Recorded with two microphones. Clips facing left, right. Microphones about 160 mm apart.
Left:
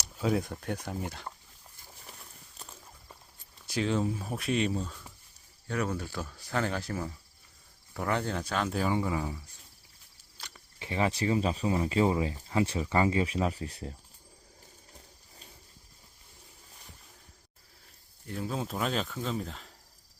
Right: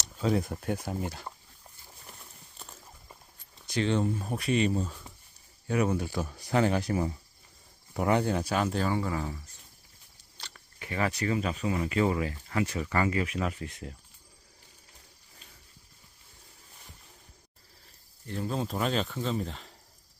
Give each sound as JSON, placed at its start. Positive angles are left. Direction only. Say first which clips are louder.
{"t": 0.0, "sound": "a sound", "louder": "right 1 dB", "side_deg": 5}
{"t": 0.5, "sound": "speech", "louder": "right 3 dB", "side_deg": -5}
{"t": 2.1, "sound": "a sound", "louder": "even", "side_deg": 0}
{"t": 3.7, "sound": "speech", "louder": "right 2 dB", "side_deg": 5}
{"t": 5.6, "sound": "speech", "louder": "right 5 dB", "side_deg": -10}
{"t": 8.7, "sound": "speech", "louder": "even", "side_deg": 10}
{"t": 10.5, "sound": "speech", "louder": "left 1 dB", "side_deg": 25}
{"t": 18.3, "sound": "speech", "louder": "right 2 dB", "side_deg": 5}